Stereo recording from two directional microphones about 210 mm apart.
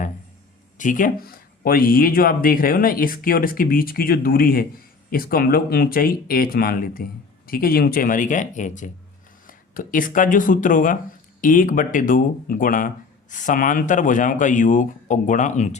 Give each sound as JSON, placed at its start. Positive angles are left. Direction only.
{"t": 0.8, "sound": "speech", "side_deg": 40}